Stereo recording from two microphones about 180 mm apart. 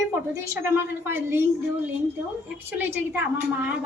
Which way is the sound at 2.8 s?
10° right (ahead or behind).